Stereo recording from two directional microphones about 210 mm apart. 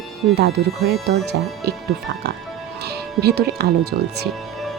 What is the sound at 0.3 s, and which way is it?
Speech, 50° right (ahead or behind).